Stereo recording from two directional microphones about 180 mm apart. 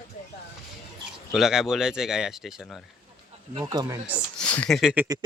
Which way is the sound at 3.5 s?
20° right (ahead or behind).